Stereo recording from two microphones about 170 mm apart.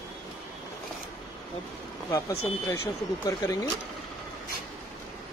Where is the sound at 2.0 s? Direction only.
20° left (ahead or behind).